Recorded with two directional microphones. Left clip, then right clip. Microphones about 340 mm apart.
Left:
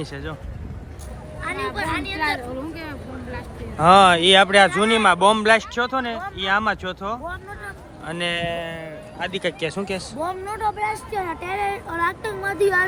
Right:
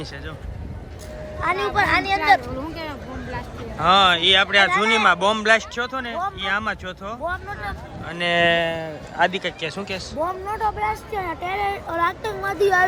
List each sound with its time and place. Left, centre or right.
1.4 s speech: right
3.8 s speech: centre
8.4 s speech: right
9.3 s speech: centre
10.2 s speech: centre